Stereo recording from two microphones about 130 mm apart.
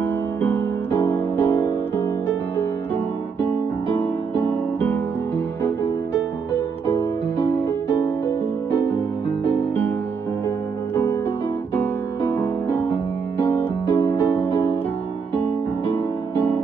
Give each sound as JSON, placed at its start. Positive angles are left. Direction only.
{"t": 0.0, "sound": "music", "side_deg": 15}
{"t": 4.7, "sound": "music", "side_deg": 15}